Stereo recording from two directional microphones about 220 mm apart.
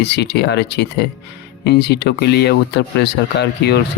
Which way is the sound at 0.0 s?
50° left (ahead or behind).